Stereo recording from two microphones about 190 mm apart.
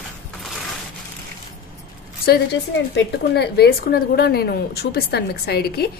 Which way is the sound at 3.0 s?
60° left (ahead or behind).